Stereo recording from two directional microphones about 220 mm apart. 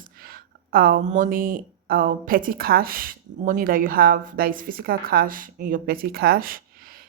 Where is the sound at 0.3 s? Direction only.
40° right (ahead or behind).